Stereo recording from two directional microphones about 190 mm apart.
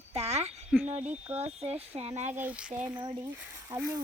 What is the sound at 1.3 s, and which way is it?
Speech, 35° right (ahead or behind).